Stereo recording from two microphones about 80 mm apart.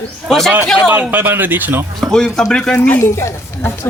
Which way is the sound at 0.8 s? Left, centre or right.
Right.